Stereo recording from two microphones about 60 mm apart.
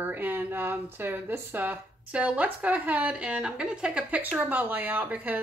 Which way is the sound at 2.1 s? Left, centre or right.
Centre.